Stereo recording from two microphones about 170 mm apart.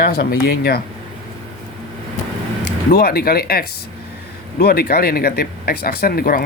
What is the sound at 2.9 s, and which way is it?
Speech, 65° left (ahead or behind).